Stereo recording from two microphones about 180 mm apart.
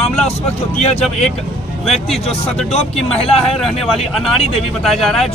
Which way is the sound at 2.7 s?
35° left (ahead or behind).